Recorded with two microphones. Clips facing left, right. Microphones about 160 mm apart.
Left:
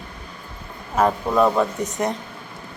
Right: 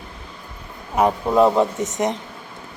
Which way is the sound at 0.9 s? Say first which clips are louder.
Right 2 dB; 15° right (ahead or behind).